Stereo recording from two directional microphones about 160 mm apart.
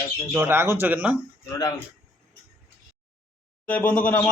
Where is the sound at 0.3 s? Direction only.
15° right (ahead or behind).